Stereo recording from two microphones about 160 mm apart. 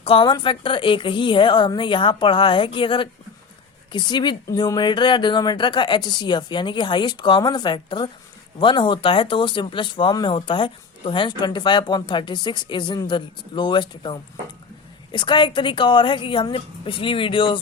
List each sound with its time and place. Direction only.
0.0 s a woman's voice: 35° left (ahead or behind)